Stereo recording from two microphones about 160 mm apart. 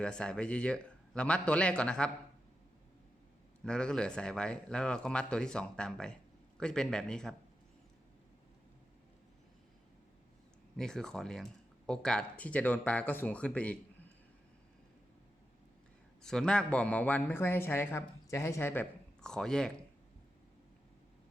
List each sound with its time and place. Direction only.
0.0 s speech: 5° left (ahead or behind)
3.6 s speech: 5° left (ahead or behind)
10.8 s speech: 5° left (ahead or behind)
16.2 s speech: 5° left (ahead or behind)